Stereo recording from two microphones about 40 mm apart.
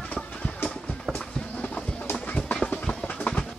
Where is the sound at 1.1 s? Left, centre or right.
Left.